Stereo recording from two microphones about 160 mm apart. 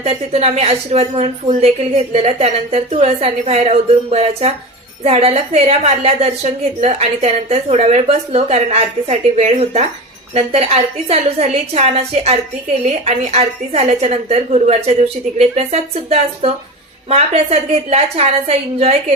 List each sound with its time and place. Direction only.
0.0 s a woman's voice: 40° right (ahead or behind)